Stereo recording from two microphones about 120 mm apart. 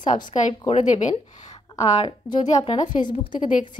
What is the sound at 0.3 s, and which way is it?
Speech, 80° left.